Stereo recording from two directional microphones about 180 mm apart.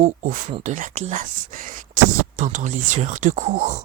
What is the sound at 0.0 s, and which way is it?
Speech, 40° right (ahead or behind).